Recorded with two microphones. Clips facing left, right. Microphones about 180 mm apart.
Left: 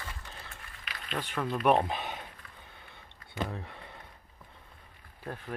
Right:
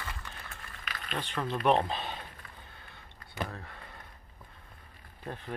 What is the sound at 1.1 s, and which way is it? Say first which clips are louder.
Speech: left 1 dB; 10° left (ahead or behind).